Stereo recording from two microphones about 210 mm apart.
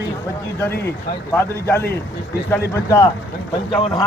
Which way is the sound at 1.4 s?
10° left (ahead or behind).